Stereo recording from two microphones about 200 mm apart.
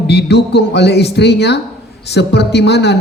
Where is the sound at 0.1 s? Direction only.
55° left (ahead or behind).